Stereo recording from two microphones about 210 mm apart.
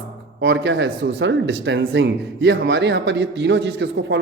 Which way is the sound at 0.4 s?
55° right (ahead or behind).